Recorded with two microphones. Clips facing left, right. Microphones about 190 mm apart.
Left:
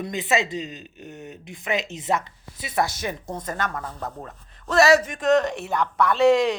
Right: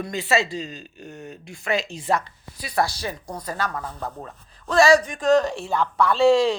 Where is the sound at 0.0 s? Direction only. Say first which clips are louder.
Right 1 dB; 20° left (ahead or behind).